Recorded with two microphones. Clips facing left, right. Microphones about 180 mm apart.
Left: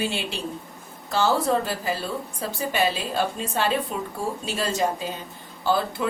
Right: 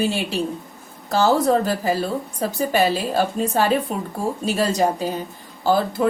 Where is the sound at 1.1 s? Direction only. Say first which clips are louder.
Right 5 dB; 40° right (ahead or behind).